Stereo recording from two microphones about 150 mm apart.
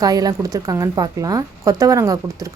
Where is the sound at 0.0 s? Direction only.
25° right (ahead or behind).